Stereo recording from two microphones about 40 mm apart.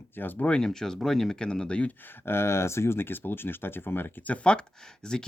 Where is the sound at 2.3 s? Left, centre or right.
Left.